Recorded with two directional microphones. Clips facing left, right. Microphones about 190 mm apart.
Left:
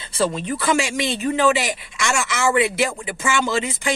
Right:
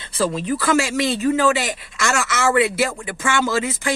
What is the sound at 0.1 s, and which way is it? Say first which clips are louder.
Speech: right 1 dB; centre (ahead or behind).